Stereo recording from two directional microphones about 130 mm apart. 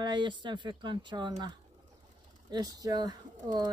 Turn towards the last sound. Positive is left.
turn(degrees=-30)  # may be behind; listen again after turning